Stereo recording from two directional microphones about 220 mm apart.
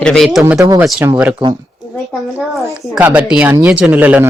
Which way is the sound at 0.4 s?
10° right (ahead or behind).